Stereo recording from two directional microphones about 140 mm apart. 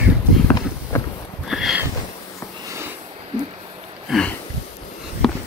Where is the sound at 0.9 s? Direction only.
20° left (ahead or behind).